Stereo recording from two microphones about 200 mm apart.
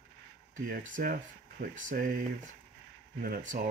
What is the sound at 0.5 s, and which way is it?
Speech, 40° right (ahead or behind).